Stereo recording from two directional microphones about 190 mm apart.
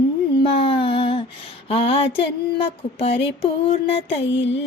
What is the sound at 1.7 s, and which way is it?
Music, 30° left (ahead or behind).